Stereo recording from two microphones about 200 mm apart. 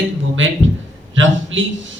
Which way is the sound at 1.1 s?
75° right (ahead or behind).